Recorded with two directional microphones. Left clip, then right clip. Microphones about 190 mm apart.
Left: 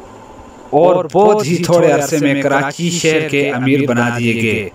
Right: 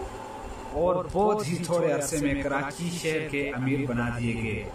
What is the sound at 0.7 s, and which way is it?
Speech, 55° left (ahead or behind).